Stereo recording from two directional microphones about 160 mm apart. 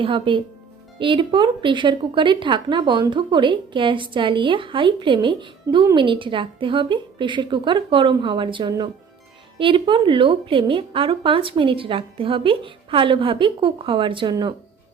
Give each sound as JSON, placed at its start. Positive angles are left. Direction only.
{"t": 0.0, "sound": "speech", "side_deg": -30}